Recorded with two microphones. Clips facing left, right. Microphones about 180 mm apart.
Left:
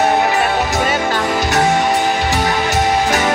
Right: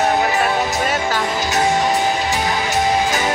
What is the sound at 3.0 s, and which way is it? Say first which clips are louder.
Music: left 3 dB; 65° left (ahead or behind).